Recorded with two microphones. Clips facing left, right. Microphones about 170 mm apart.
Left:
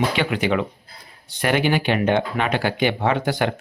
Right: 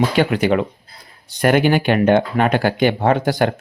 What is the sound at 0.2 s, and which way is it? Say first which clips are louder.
Speech: right 5 dB; 45° right (ahead or behind).